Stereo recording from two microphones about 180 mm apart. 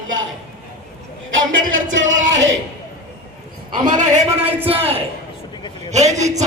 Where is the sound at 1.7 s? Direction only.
90° right.